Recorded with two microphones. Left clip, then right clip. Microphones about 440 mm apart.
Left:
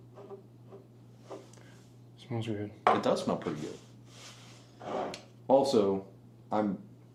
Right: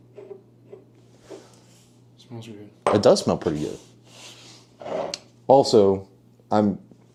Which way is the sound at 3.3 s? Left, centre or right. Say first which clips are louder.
Right 9 dB; right.